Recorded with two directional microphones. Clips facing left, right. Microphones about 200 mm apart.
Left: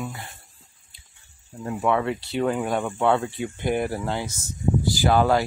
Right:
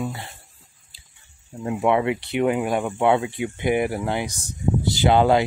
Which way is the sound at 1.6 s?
10° right (ahead or behind).